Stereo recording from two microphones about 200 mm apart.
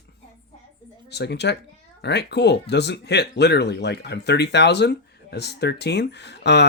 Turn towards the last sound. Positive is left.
turn(degrees=55)  # may be behind; listen again after turning